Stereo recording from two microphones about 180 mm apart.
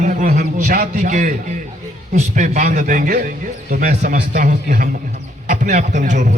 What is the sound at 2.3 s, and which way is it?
A man's voice, 40° right (ahead or behind).